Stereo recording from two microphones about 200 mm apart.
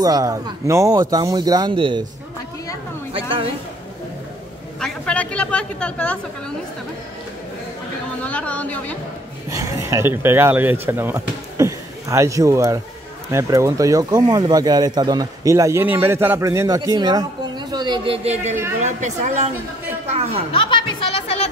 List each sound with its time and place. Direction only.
0.0 s speech: 15° right (ahead or behind)
3.1 s speech: 25° right (ahead or behind)
4.7 s a man's voice: 5° left (ahead or behind)
8.2 s speech: 5° left (ahead or behind)
9.5 s a woman's voice: 15° right (ahead or behind)